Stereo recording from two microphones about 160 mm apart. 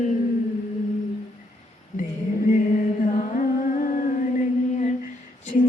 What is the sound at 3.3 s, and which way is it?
Music, 55° left (ahead or behind).